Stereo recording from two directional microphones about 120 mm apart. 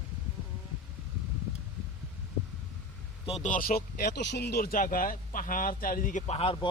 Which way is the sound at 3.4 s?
90° left.